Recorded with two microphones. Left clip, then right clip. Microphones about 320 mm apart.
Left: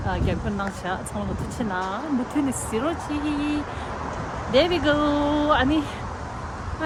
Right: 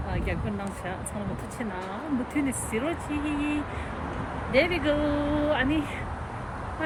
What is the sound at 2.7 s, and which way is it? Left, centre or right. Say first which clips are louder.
Speech: left 4 dB; centre.